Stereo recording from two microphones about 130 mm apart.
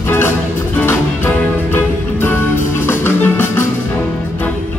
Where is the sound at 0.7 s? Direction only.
15° left (ahead or behind).